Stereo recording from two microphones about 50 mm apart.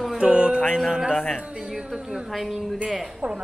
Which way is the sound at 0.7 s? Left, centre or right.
Centre.